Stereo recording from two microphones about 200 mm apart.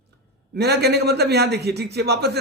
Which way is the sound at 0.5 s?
55° right (ahead or behind).